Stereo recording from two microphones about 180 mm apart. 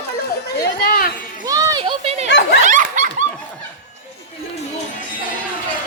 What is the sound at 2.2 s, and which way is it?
Snicker, 75° left (ahead or behind).